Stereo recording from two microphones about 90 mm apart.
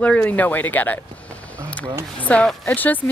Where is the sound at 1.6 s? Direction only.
15° left (ahead or behind).